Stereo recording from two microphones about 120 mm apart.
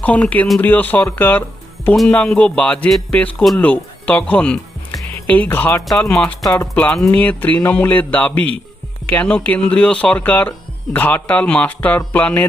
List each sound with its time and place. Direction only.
0.0 s speech: 10° left (ahead or behind)